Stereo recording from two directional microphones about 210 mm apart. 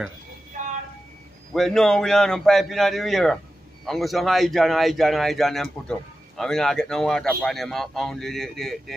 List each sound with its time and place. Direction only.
0.5 s vehicle: 40° right (ahead or behind)
1.5 s speech: centre (ahead or behind)